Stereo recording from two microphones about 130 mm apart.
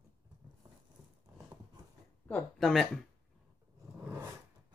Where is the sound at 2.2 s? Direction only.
5° left (ahead or behind).